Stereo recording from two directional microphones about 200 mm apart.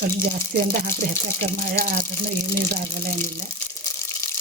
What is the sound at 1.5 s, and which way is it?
Speech, 45° right (ahead or behind).